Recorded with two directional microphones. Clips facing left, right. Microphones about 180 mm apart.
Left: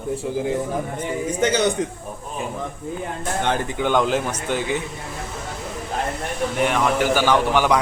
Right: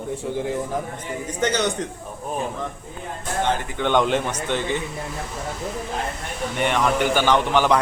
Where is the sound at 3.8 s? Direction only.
5° left (ahead or behind).